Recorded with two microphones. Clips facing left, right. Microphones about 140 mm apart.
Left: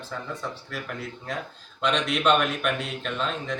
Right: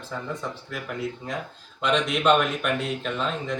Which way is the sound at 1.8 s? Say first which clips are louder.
Right 1 dB; 5° right (ahead or behind).